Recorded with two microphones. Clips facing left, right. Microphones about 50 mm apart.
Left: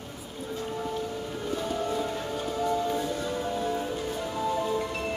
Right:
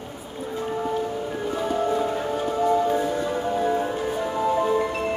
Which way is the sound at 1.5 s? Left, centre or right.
Right.